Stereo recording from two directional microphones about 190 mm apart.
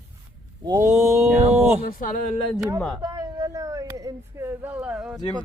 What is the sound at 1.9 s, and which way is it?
Speech, 45° left (ahead or behind).